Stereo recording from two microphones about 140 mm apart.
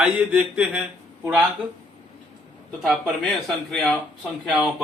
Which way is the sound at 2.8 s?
Centre (ahead or behind).